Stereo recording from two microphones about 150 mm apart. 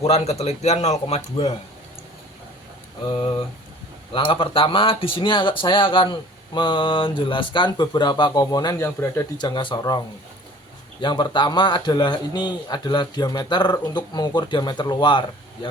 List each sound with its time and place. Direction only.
0.0 s speech: 45° left (ahead or behind)
3.1 s speech: 30° left (ahead or behind)
9.4 s a man's voice: 30° left (ahead or behind)
11.0 s a man's voice: 30° left (ahead or behind)